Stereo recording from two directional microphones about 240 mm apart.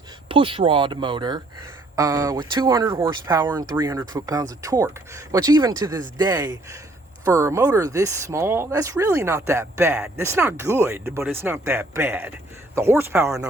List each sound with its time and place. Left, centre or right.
0.3 s speech: right